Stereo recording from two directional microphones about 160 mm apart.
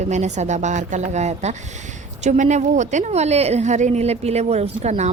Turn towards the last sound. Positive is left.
turn(degrees=-45)  # may be behind; listen again after turning